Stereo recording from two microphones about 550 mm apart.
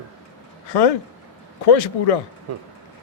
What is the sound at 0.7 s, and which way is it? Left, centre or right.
Speech, left.